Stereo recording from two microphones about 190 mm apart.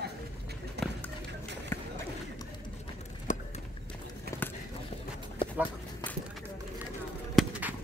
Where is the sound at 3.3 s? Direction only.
45° left (ahead or behind).